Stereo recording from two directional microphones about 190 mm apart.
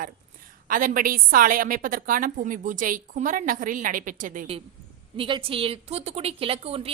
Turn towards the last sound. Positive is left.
turn(degrees=-30)  # may be behind; listen again after turning